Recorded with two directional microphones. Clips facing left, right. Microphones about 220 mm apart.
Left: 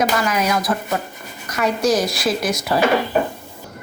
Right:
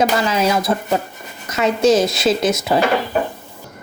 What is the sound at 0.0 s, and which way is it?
A woman's voice, 25° right (ahead or behind).